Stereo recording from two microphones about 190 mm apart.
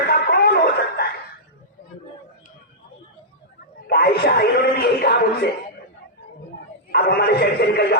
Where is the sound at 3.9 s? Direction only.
55° left (ahead or behind).